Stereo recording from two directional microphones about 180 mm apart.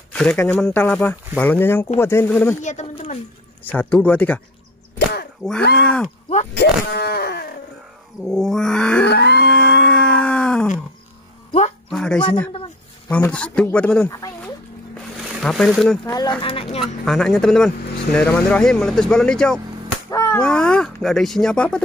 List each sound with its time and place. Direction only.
0.1 s speech: 5° left (ahead or behind)
2.6 s speech: 40° left (ahead or behind)
3.7 s speech: 10° left (ahead or behind)
5.4 s speech: centre (ahead or behind)
6.5 s speech: 65° left (ahead or behind)
8.2 s speech: centre (ahead or behind)
9.1 s speech: 65° left (ahead or behind)
9.5 s a sound: 5° left (ahead or behind)
11.9 s speech: 5° left (ahead or behind)
15.4 s speech: centre (ahead or behind)
16.1 s speech: 20° left (ahead or behind)
16.8 s speech: centre (ahead or behind)
20.1 s a sound: 15° left (ahead or behind)
20.3 s speech: 5° left (ahead or behind)